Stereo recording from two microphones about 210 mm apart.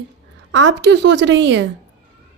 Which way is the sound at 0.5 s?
60° right (ahead or behind).